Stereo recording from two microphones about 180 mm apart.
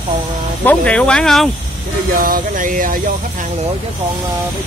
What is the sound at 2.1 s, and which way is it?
Speech, 50° right (ahead or behind).